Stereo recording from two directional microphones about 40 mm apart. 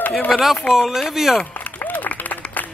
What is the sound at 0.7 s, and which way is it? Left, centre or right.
Speech, centre.